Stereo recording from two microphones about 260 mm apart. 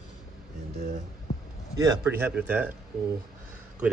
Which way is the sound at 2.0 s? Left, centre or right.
Centre.